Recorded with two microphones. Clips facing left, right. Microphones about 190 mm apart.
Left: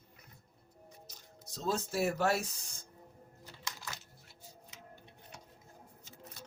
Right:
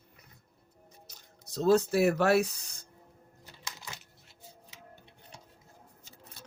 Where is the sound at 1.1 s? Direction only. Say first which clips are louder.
Right 7 dB; 65° right (ahead or behind).